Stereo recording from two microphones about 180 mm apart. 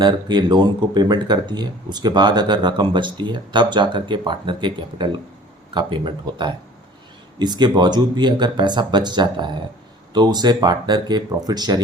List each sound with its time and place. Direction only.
0.0 s speech: 25° right (ahead or behind)